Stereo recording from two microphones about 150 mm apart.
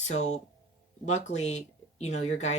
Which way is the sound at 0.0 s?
50° left (ahead or behind).